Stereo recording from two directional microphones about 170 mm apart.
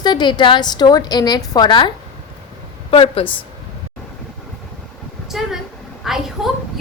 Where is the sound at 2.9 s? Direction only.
35° left (ahead or behind).